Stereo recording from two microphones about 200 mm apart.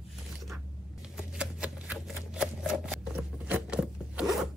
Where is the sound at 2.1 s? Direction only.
5° right (ahead or behind).